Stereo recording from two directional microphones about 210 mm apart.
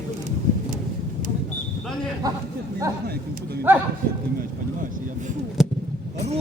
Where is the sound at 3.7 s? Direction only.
10° right (ahead or behind).